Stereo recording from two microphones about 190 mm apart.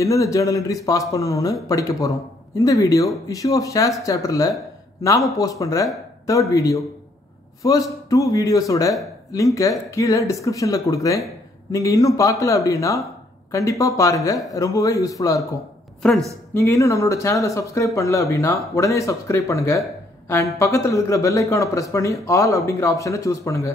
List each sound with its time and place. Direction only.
0.0 s speech: 15° left (ahead or behind)
16.0 s a woman's voice: centre (ahead or behind)
16.5 s speech: 15° left (ahead or behind)